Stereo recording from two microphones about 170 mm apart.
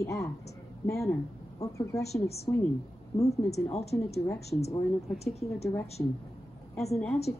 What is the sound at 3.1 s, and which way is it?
Speech, 20° left (ahead or behind).